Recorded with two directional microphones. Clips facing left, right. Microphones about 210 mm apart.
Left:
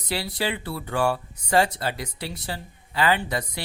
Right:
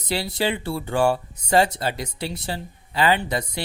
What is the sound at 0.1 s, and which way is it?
Speech, 25° right (ahead or behind).